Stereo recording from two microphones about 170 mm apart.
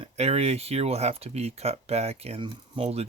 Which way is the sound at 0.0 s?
35° right (ahead or behind).